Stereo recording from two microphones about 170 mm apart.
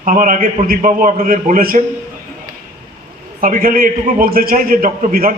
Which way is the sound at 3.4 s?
55° right (ahead or behind).